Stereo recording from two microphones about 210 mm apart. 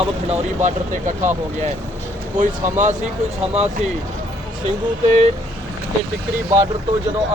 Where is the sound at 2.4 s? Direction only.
35° right (ahead or behind).